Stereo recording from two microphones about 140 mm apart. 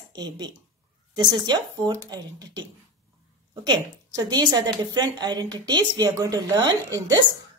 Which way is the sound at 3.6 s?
30° right (ahead or behind).